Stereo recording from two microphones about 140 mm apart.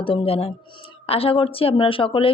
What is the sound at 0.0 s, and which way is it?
A woman's voice, 40° left (ahead or behind).